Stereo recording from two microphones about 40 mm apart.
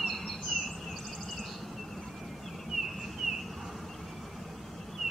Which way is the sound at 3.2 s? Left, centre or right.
Centre.